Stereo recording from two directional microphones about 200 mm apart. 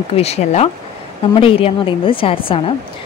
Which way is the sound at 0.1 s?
30° left (ahead or behind).